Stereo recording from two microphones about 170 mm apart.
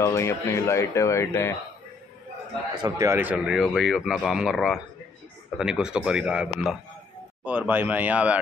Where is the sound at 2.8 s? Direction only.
20° right (ahead or behind).